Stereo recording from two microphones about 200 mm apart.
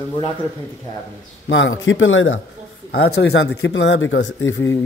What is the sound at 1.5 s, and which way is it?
Speech, 75° left (ahead or behind).